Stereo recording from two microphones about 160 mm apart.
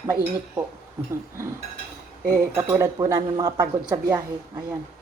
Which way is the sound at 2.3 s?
15° right (ahead or behind).